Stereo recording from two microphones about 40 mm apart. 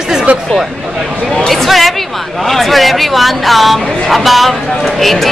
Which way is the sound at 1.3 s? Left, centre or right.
Centre.